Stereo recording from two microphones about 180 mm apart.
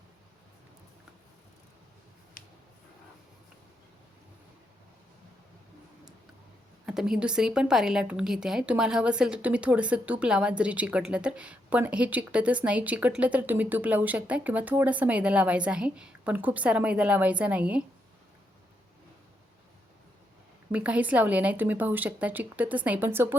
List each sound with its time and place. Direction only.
2.4 s a sound: 50° left (ahead or behind)
6.8 s a woman's voice: 5° right (ahead or behind)
20.7 s a woman's voice: 5° right (ahead or behind)